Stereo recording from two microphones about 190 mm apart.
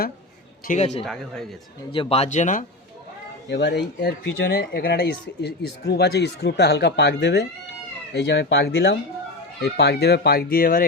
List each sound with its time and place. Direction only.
0.7 s speech: 35° left (ahead or behind)
1.0 s speech: centre (ahead or behind)
1.9 s speech: 30° left (ahead or behind)
3.5 s speech: 65° left (ahead or behind)